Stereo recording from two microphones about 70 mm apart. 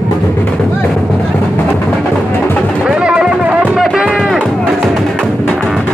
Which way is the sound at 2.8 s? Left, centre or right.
Centre.